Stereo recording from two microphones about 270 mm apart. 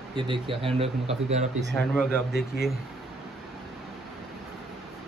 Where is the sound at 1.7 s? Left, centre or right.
Centre.